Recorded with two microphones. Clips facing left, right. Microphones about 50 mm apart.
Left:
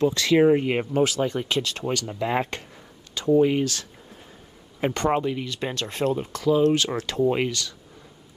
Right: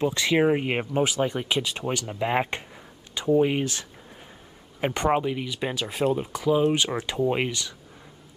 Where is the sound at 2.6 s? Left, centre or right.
Centre.